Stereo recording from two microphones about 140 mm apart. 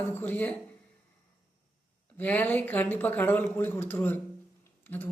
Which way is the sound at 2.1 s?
10° left (ahead or behind).